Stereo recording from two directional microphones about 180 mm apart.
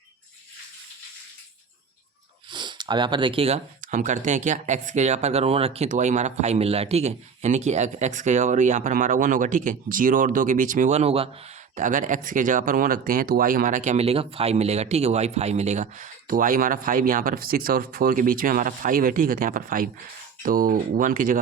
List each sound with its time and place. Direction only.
2.5 s speech: 25° right (ahead or behind)
11.8 s speech: 45° right (ahead or behind)